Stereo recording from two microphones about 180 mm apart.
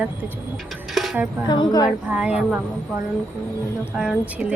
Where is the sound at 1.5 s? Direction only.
25° left (ahead or behind).